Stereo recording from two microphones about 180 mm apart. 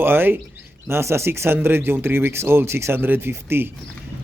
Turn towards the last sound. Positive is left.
turn(degrees=-10)  # may be behind; listen again after turning